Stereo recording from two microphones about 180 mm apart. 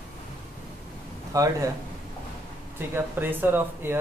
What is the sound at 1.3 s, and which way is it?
Speech, 20° right (ahead or behind).